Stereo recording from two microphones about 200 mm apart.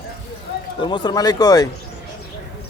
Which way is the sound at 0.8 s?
25° left (ahead or behind).